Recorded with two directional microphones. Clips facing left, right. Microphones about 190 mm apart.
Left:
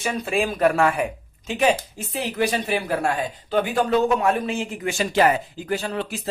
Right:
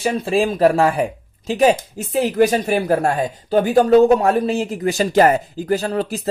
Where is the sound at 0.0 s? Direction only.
30° right (ahead or behind).